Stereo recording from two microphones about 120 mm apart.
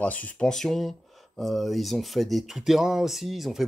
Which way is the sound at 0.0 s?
10° left (ahead or behind).